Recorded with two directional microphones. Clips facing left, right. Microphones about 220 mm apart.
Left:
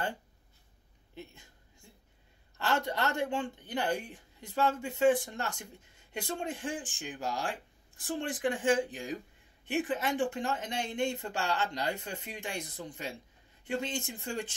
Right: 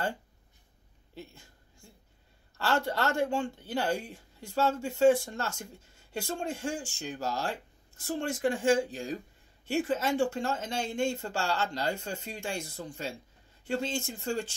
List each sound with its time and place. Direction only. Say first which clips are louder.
1.1 s a woman's voice: right 1 dB; 20° left (ahead or behind)
2.5 s speech: right 2 dB; 20° left (ahead or behind)
4.6 s speech: right 2 dB; 40° right (ahead or behind)
4.9 s speech: right 4 dB; 20° left (ahead or behind)